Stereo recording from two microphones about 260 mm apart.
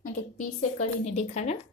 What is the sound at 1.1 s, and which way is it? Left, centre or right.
Speech, left.